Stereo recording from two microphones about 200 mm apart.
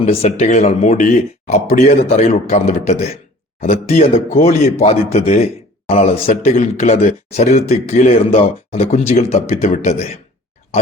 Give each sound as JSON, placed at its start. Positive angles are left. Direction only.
{"t": 0.0, "sound": "speech", "side_deg": 35}